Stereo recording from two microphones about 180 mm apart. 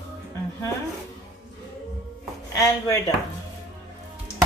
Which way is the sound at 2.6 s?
15° left (ahead or behind).